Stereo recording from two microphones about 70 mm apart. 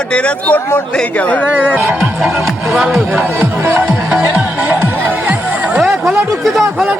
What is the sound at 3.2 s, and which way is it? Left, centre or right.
Speech, right.